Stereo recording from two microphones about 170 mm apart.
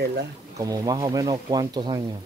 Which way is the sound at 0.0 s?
70° right (ahead or behind).